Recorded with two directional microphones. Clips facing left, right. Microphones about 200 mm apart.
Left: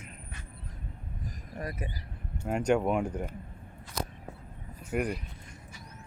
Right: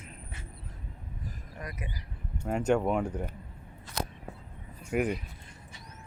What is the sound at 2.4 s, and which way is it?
Speech, 5° left (ahead or behind).